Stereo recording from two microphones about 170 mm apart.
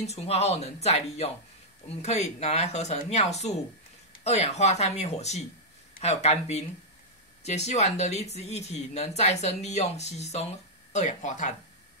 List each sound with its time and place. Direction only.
0.0 s speech: 40° left (ahead or behind)